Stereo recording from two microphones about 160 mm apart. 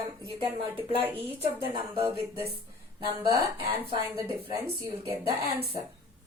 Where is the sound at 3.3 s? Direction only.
20° right (ahead or behind).